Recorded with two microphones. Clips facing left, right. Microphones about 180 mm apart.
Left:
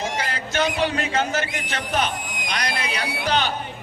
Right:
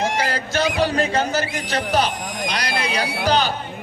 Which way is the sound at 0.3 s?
35° right (ahead or behind).